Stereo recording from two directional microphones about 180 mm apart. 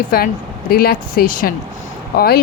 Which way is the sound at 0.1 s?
55° left (ahead or behind).